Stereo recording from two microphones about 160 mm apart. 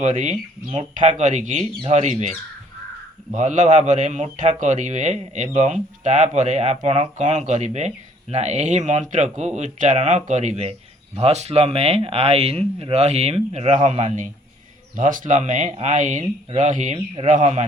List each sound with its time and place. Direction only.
0.0 s speech: 45° right (ahead or behind)
3.3 s speech: 50° right (ahead or behind)